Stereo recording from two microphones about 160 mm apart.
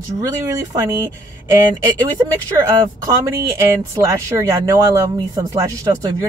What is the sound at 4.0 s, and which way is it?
Speech, 20° right (ahead or behind).